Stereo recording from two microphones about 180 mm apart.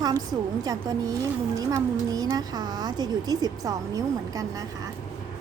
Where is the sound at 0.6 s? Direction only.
20° right (ahead or behind).